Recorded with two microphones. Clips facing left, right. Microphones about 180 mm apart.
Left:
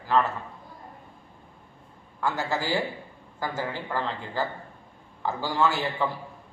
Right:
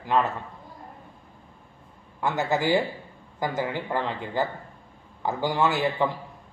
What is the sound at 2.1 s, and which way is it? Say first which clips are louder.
A man's voice: right 3 dB; 20° right (ahead or behind).